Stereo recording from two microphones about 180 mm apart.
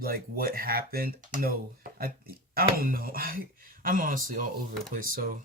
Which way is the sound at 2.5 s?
55° right (ahead or behind).